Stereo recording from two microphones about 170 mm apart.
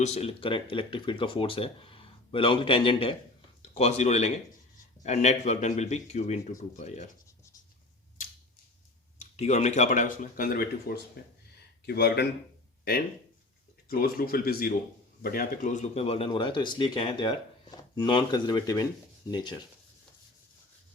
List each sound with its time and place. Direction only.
0.0 s speech: 40° left (ahead or behind)
9.3 s speech: 40° left (ahead or behind); by 12.3 s 75° left (ahead or behind)
13.8 s speech: 60° left (ahead or behind); by 19.6 s 25° left (ahead or behind)